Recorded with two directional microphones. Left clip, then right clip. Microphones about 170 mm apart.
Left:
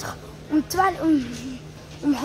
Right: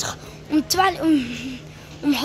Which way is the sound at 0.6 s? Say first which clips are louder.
Right 2 dB; 20° right (ahead or behind).